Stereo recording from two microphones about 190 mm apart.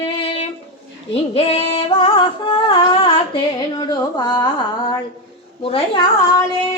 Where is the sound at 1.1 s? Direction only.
30° left (ahead or behind).